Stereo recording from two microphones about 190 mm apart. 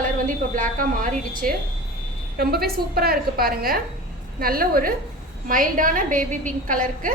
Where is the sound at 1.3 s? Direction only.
45° right (ahead or behind).